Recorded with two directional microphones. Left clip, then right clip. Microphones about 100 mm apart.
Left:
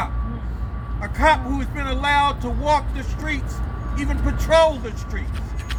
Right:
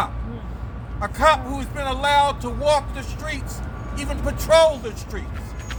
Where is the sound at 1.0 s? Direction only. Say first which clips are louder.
Even; 20° right (ahead or behind).